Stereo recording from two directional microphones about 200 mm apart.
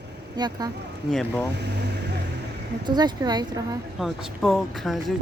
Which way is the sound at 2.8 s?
20° right (ahead or behind).